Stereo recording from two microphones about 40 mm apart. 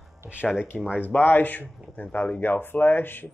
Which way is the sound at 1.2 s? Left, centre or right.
Left.